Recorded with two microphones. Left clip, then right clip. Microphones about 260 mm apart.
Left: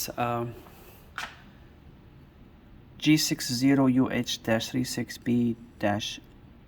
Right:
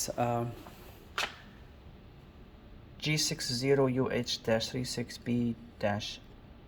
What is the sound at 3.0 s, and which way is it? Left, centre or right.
Speech, centre.